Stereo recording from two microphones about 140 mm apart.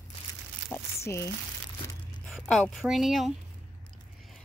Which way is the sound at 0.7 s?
20° left (ahead or behind).